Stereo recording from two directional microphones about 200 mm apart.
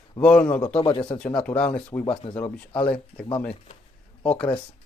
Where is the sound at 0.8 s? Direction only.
25° left (ahead or behind).